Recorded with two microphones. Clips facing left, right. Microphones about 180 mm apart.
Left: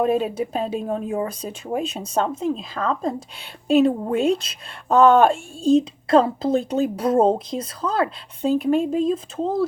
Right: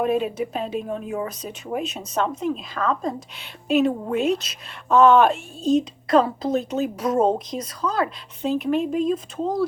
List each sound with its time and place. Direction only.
0.0 s a woman's voice: 35° left (ahead or behind)
1.2 s a woman's voice: 30° left (ahead or behind)